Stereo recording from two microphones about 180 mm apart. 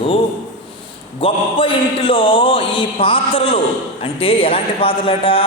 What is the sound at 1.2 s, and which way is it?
A man's voice, 30° left (ahead or behind).